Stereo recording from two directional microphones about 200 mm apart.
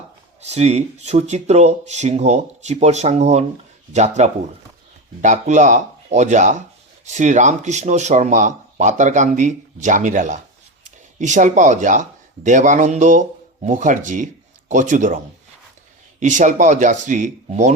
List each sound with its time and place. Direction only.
0.4 s speech: 35° right (ahead or behind)
16.2 s speech: 40° right (ahead or behind)